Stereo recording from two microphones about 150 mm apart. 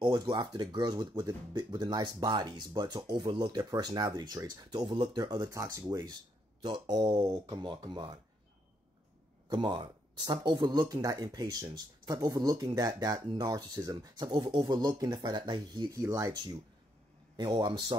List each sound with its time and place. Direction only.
0.0 s speech: 30° right (ahead or behind)
9.5 s speech: 30° right (ahead or behind)